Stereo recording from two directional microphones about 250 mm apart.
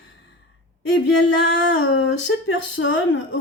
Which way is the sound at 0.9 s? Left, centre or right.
Left.